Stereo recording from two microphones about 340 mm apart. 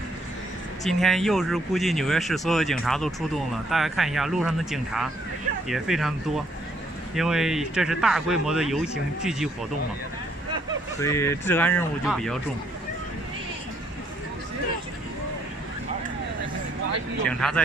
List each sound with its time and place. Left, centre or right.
0.8 s speech: centre
11.0 s speech: centre
17.3 s speech: centre